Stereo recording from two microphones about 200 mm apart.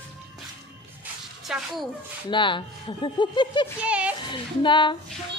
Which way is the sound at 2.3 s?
25° left (ahead or behind).